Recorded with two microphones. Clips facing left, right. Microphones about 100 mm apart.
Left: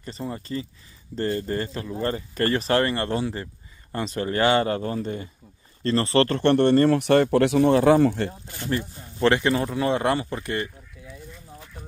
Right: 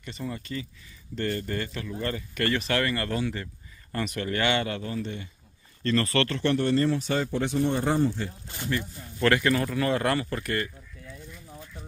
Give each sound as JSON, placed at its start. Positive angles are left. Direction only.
{"t": 0.0, "sound": "speech", "side_deg": 35}
{"t": 6.2, "sound": "speech", "side_deg": 50}
{"t": 8.1, "sound": "speech", "side_deg": 55}
{"t": 8.6, "sound": "speech", "side_deg": 30}